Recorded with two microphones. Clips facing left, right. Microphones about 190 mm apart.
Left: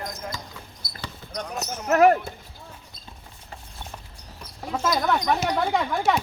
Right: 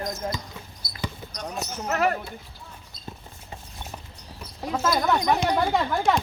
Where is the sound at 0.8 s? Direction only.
50° left (ahead or behind).